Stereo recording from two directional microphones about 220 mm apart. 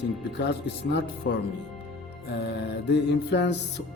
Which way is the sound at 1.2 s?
55° left (ahead or behind).